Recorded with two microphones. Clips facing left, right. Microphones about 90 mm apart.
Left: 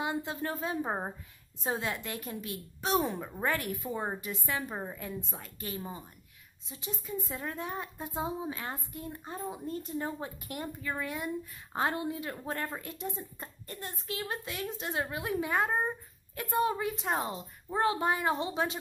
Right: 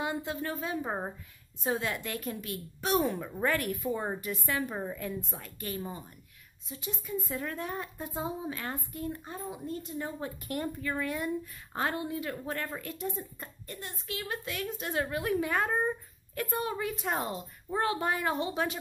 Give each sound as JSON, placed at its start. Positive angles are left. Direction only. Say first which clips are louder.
{"t": 0.0, "sound": "a woman's voice", "louder": "even", "side_deg": 20}
{"t": 6.7, "sound": "a woman's voice", "louder": "right 2 dB", "side_deg": 25}
{"t": 10.2, "sound": "a woman's voice", "louder": "right 4 dB", "side_deg": 15}